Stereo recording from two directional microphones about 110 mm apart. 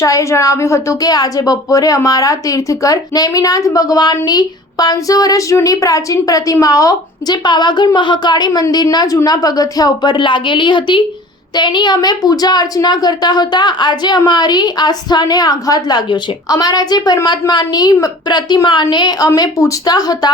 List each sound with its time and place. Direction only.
0.0 s speech: 30° left (ahead or behind)